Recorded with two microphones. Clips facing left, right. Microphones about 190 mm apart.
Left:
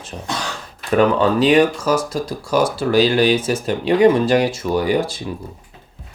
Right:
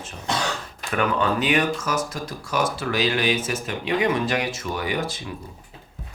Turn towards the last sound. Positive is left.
turn(degrees=35)  # may be behind; listen again after turning